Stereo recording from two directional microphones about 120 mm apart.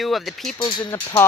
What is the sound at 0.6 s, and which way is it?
Speech, 40° left (ahead or behind).